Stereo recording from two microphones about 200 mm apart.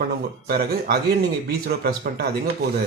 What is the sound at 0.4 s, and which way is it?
Speech, 50° right (ahead or behind).